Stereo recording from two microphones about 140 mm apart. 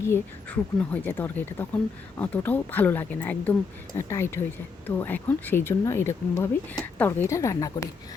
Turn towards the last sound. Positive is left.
turn(degrees=25)  # may be behind; listen again after turning